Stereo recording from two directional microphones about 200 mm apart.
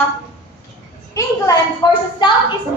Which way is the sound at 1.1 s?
15° left (ahead or behind).